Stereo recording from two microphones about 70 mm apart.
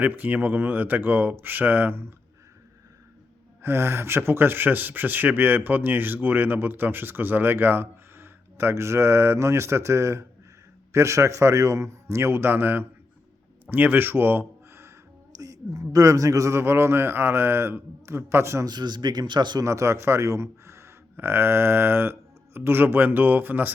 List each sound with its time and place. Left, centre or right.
0.0 s speech: right
3.6 s a man's voice: right
15.3 s speech: right
18.6 s speech: right
19.6 s speech: right